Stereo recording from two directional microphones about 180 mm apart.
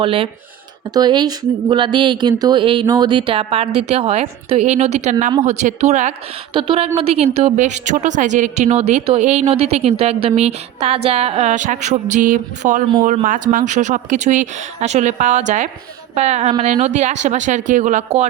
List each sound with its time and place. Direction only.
0.0 s a woman's voice: 30° right (ahead or behind)
6.5 s a woman's voice: 30° right (ahead or behind)